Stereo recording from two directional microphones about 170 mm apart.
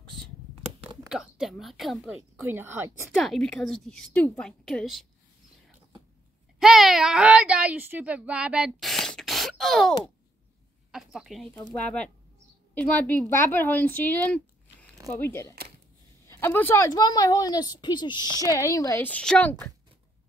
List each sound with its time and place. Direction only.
1.0 s a woman's voice: 5° right (ahead or behind)
2.3 s speech: 15° right (ahead or behind)
3.2 s a woman's voice: centre (ahead or behind)
6.6 s a woman's voice: centre (ahead or behind)
11.5 s a woman's voice: 10° left (ahead or behind)